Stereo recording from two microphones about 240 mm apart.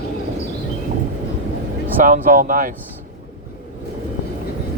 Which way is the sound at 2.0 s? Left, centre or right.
Right.